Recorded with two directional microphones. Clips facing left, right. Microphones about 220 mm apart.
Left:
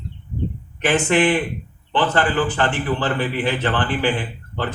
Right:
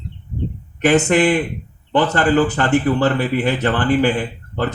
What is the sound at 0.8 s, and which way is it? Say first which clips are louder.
Speech: right 3 dB; 40° right (ahead or behind).